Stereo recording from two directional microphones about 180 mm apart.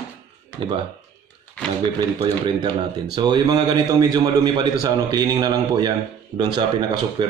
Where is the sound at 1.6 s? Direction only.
5° left (ahead or behind).